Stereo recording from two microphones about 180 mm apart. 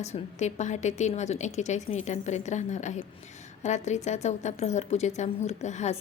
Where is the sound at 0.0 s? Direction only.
40° left (ahead or behind).